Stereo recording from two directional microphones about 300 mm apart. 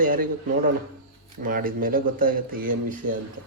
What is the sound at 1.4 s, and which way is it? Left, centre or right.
Speech, right.